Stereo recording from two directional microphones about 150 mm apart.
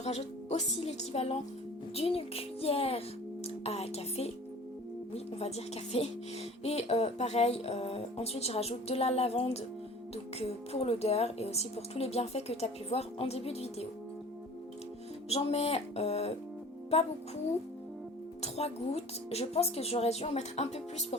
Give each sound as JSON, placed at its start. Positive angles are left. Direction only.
{"t": 0.0, "sound": "speech", "side_deg": 45}
{"t": 2.0, "sound": "music", "side_deg": 40}
{"t": 3.4, "sound": "speech", "side_deg": 45}
{"t": 15.3, "sound": "speech", "side_deg": 45}
{"t": 18.4, "sound": "speech", "side_deg": 45}